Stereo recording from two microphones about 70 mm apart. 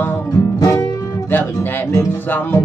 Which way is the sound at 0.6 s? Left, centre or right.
Left.